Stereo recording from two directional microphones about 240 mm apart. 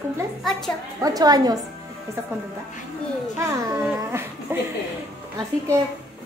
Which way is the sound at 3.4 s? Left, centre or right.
Centre.